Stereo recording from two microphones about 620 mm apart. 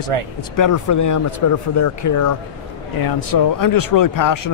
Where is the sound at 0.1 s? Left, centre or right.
Right.